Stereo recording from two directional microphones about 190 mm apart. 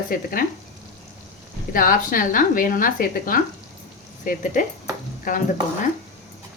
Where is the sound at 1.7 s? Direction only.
45° left (ahead or behind).